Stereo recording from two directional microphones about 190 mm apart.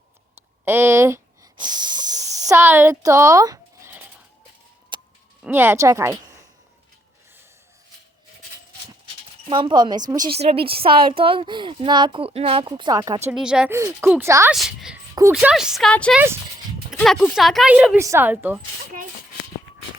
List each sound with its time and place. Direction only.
0.6 s speech: 10° right (ahead or behind)
4.9 s a sound: 25° right (ahead or behind)
5.4 s speech: 10° right (ahead or behind)
9.5 s speech: 25° right (ahead or behind)
10.3 s speech: 30° right (ahead or behind)
13.3 s speech: 5° right (ahead or behind)
14.5 s speech: centre (ahead or behind)
16.1 s speech: 15° right (ahead or behind)
16.9 s speech: centre (ahead or behind)